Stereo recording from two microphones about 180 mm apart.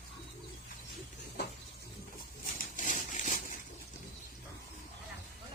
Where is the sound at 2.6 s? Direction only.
45° left (ahead or behind).